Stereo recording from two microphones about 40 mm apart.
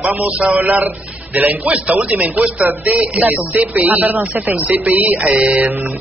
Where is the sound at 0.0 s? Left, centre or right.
Right.